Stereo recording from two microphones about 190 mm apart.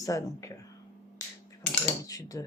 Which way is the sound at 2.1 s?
20° left (ahead or behind).